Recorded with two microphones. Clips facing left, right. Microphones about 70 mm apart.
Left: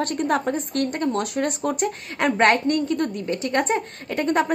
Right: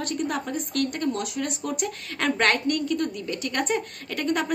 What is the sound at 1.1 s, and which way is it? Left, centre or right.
Speech, left.